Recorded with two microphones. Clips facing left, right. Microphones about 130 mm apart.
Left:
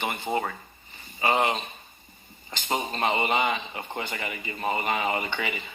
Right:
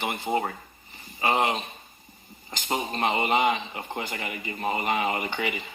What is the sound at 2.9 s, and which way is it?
Speech, 20° right (ahead or behind).